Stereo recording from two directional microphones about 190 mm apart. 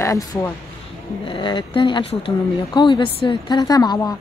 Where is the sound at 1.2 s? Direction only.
25° left (ahead or behind).